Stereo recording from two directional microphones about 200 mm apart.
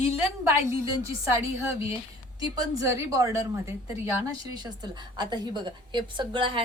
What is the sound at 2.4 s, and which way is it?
A woman's voice, 20° right (ahead or behind).